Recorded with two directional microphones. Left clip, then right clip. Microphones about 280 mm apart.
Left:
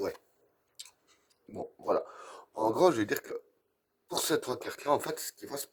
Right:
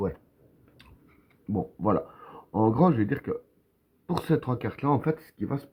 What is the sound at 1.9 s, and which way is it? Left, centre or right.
Speech, left.